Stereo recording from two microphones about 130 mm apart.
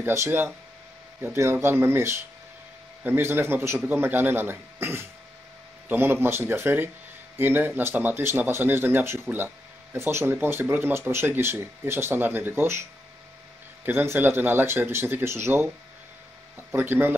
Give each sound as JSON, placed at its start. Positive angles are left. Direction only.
{"t": 0.0, "sound": "speech", "side_deg": -20}
{"t": 13.8, "sound": "speech", "side_deg": -15}